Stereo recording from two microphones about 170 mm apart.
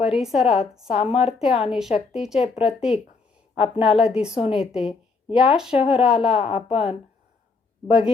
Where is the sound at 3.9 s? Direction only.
5° right (ahead or behind).